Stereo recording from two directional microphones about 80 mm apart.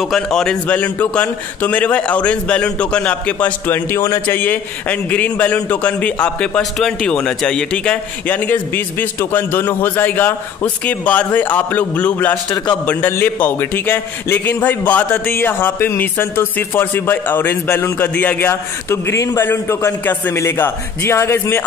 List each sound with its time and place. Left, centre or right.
0.0 s a man's voice: centre
0.7 s a man's voice: centre
6.6 s speech: centre
8.3 s a man's voice: left
18.5 s a man's voice: left